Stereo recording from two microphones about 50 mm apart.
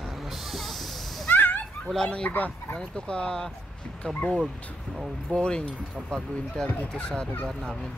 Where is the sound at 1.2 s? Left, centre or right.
Left.